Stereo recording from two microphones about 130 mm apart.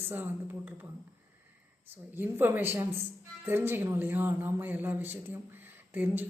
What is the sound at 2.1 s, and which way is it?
A woman's voice, 15° right (ahead or behind).